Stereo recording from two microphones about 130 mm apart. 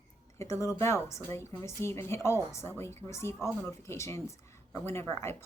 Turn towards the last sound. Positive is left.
turn(degrees=20)  # may be behind; listen again after turning